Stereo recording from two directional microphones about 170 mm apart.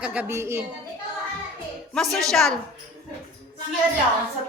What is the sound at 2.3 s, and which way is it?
Speech, centre (ahead or behind).